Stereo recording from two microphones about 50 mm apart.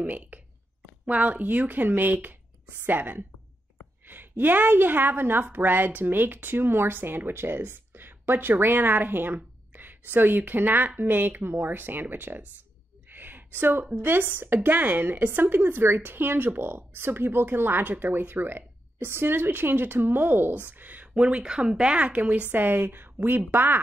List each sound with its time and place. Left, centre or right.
0.0 s a woman's voice: right
13.1 s a sound: right
14.0 s a woman's voice: right
21.1 s a woman's voice: right